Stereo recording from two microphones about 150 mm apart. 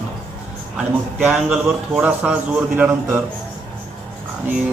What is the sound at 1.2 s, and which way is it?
A man's voice, 5° right (ahead or behind).